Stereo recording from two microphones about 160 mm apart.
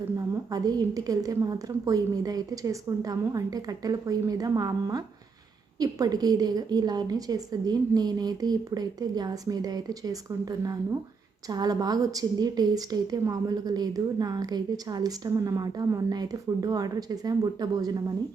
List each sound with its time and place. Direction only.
0.5 s a woman's voice: 20° right (ahead or behind)